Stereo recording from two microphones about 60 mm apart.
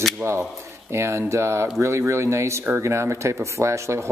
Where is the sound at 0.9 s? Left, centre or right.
Right.